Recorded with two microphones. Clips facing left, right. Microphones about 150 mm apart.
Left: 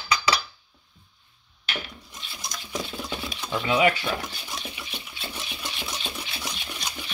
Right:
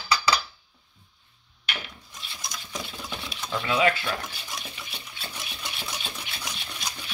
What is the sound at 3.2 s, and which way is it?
Speech, 5° left (ahead or behind).